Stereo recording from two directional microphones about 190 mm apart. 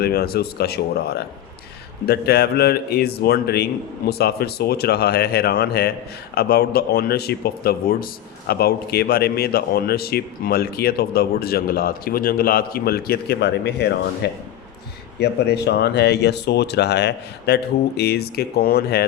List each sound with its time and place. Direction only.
0.0 s speech: 55° left (ahead or behind)